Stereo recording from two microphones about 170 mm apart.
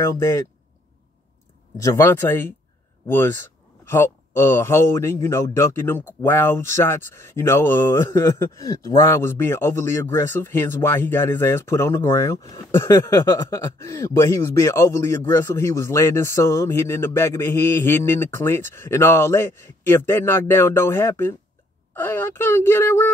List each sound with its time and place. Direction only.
0.0 s speech: 15° left (ahead or behind)
1.8 s speech: 15° left (ahead or behind)